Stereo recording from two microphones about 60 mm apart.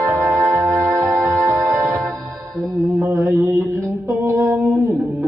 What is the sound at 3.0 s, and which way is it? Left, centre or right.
Mantra, right.